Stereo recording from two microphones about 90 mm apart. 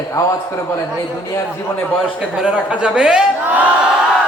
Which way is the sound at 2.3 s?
10° right (ahead or behind).